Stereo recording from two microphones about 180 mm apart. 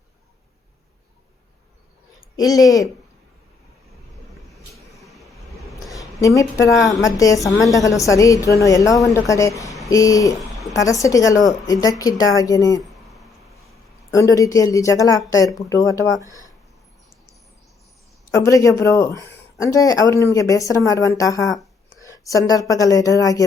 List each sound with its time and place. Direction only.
2.3 s speech: 20° left (ahead or behind)
4.9 s vehicle: centre (ahead or behind)
5.8 s a sound: 20° left (ahead or behind)
7.0 s a woman's voice: 20° left (ahead or behind)
10.5 s a sound: centre (ahead or behind)
10.8 s speech: 20° left (ahead or behind)
14.1 s a woman's voice: 20° left (ahead or behind)
18.3 s a woman's voice: 20° left (ahead or behind)